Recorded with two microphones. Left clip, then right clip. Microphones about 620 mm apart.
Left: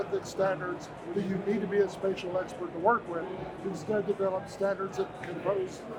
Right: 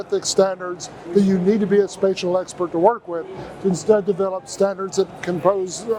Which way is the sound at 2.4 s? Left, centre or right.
Right.